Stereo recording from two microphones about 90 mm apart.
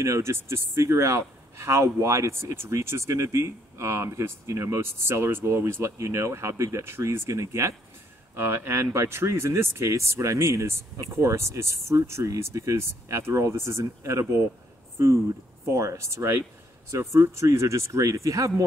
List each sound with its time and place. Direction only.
0.0 s speech: 30° right (ahead or behind)
15.6 s speech: 35° right (ahead or behind)